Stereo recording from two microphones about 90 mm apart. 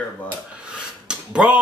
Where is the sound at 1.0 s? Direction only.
10° right (ahead or behind).